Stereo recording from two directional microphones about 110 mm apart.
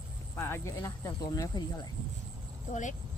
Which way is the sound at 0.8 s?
40° left (ahead or behind).